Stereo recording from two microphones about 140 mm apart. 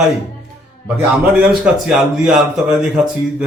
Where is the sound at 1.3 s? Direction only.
5° right (ahead or behind).